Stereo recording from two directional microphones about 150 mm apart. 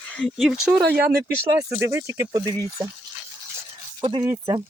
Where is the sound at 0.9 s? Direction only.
90° right.